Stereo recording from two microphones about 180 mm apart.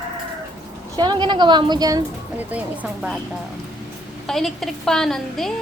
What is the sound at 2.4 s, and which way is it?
A woman's voice, 10° right (ahead or behind).